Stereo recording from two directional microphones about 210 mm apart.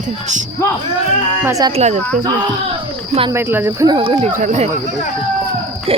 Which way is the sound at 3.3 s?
10° right (ahead or behind).